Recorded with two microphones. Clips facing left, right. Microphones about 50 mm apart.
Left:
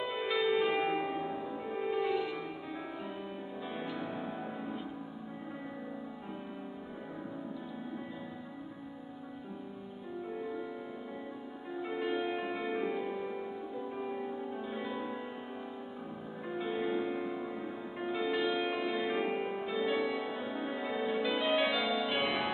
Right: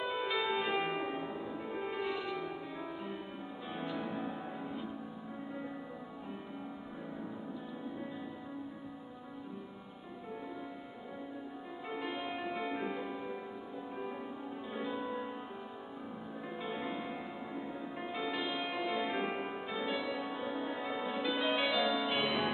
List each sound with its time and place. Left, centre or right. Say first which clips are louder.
0.3 s music: left 6 dB; centre
3.7 s music: right 1 dB; centre
11.9 s music: left 5 dB; centre
14.8 s music: right 3 dB; centre
16.5 s music: left 6 dB; centre
19.9 s music: left 3 dB; left
20.2 s music: left 1 dB; centre